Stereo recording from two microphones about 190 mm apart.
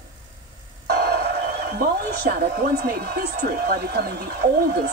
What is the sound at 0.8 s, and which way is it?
Music, 55° right (ahead or behind).